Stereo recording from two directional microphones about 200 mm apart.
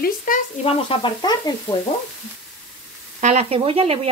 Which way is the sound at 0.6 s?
25° left (ahead or behind).